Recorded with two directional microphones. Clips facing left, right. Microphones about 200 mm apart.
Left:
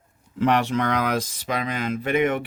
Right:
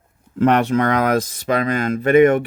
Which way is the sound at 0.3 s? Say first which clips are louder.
Right 5 dB; 55° right (ahead or behind).